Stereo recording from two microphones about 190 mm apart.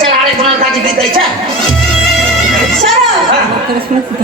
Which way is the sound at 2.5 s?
Centre (ahead or behind).